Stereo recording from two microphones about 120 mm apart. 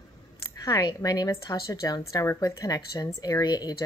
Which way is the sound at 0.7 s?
30° left (ahead or behind).